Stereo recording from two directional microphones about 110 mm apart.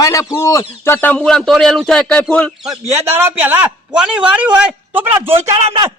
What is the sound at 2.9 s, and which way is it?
A man's voice, 20° right (ahead or behind).